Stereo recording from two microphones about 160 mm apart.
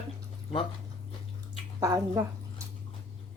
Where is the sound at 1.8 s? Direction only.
20° right (ahead or behind).